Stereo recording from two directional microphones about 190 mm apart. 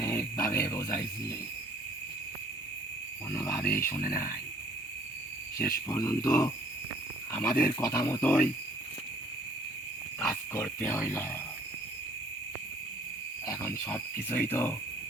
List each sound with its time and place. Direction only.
0.0 s a sound: 15° left (ahead or behind)
0.6 s speech: 15° left (ahead or behind)
3.3 s speech: 15° left (ahead or behind)
5.9 s speech: 15° left (ahead or behind)
10.2 s speech: 15° left (ahead or behind)
13.5 s speech: 15° left (ahead or behind)